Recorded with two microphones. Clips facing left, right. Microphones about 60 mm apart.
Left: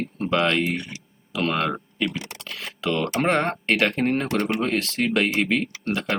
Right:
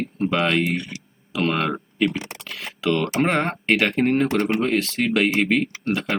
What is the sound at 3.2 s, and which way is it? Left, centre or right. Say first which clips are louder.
Speech: right 1 dB; centre.